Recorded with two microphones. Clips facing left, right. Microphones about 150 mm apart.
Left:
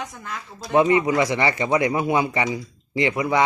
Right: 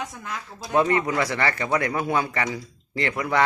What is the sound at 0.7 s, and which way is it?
A man's voice, 15° left (ahead or behind).